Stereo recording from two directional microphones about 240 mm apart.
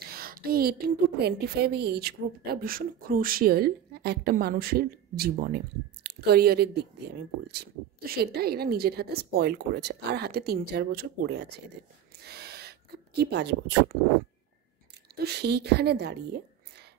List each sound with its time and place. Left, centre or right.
0.1 s a woman's voice: right
15.1 s a woman's voice: right